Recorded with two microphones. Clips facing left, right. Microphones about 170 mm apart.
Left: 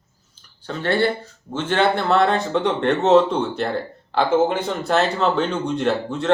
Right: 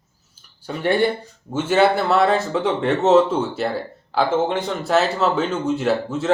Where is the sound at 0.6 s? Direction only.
10° right (ahead or behind).